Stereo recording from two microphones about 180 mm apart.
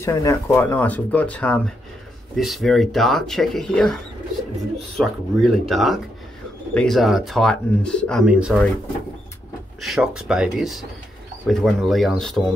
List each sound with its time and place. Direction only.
0.0 s speech: 20° left (ahead or behind); by 8.6 s 5° right (ahead or behind)
9.8 s speech: centre (ahead or behind)